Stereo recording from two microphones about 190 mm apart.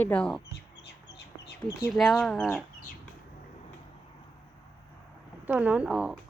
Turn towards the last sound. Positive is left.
turn(degrees=-5)  # may be behind; listen again after turning